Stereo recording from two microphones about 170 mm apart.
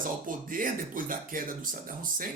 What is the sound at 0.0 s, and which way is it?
Speech, 55° right (ahead or behind).